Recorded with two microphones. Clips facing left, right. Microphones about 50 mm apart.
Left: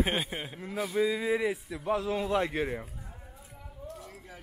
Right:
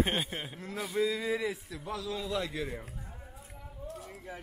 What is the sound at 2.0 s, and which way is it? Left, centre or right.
Speech, left.